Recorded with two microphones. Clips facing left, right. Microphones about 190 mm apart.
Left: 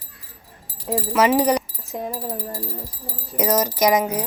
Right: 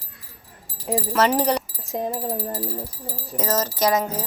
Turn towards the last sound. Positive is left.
turn(degrees=15)  # may be behind; listen again after turning